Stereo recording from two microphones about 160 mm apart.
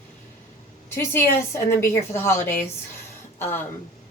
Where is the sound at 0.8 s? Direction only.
15° left (ahead or behind).